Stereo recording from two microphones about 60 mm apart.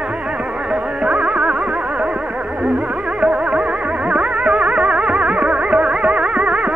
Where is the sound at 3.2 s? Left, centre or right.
Centre.